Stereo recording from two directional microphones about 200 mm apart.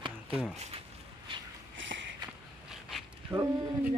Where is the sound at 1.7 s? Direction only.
70° right (ahead or behind).